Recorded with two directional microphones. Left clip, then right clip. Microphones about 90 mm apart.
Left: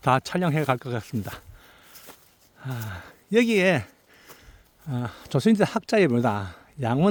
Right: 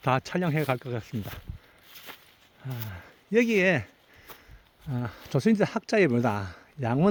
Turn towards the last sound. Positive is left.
turn(degrees=30)  # may be behind; listen again after turning